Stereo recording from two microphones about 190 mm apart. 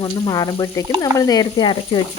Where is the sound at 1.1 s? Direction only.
20° left (ahead or behind).